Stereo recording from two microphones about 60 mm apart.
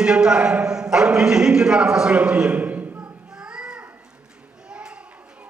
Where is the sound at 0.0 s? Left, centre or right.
Centre.